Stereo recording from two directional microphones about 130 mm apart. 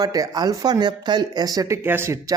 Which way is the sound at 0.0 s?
30° right (ahead or behind).